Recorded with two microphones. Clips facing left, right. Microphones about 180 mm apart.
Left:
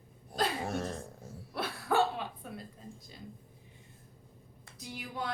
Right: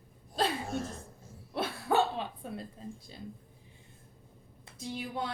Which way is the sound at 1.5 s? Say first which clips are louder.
Right 1 dB; 25° right (ahead or behind).